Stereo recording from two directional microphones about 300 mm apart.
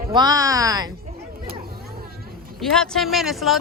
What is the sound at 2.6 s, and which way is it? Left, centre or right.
Speech, centre.